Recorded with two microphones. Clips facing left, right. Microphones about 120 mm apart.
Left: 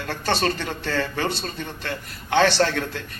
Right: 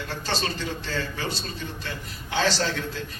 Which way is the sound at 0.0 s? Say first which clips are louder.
Left 6 dB; 60° left (ahead or behind).